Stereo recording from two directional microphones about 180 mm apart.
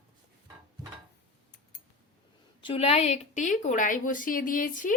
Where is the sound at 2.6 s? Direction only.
35° left (ahead or behind); by 4.9 s 50° left (ahead or behind).